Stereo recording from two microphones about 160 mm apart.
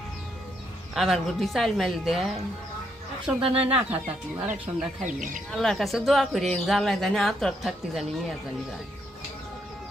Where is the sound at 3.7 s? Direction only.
10° right (ahead or behind).